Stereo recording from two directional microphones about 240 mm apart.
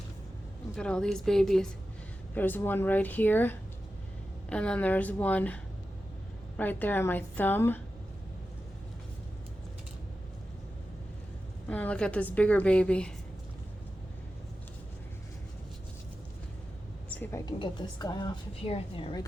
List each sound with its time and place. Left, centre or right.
0.8 s a woman's voice: centre
6.6 s speech: centre
11.7 s a woman's voice: centre
17.1 s a woman's voice: centre